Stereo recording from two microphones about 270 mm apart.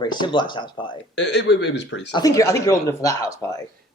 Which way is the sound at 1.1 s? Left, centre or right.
Left.